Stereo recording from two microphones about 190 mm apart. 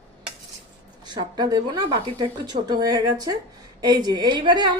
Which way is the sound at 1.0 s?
20° right (ahead or behind).